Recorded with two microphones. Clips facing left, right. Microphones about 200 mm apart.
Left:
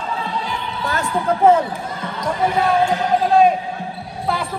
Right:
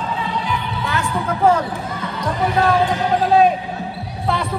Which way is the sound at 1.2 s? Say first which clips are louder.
Left 3 dB; 25° left (ahead or behind).